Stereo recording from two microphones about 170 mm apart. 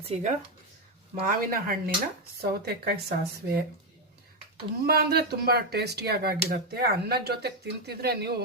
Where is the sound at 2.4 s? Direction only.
65° right (ahead or behind).